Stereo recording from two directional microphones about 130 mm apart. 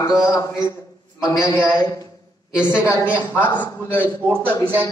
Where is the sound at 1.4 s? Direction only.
10° right (ahead or behind).